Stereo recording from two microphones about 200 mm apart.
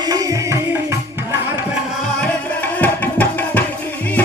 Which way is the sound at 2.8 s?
10° left (ahead or behind).